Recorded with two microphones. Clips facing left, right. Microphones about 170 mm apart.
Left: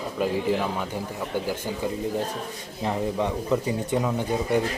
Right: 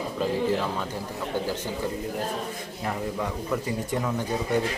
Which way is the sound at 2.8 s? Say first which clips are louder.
Left 4 dB; 20° left (ahead or behind).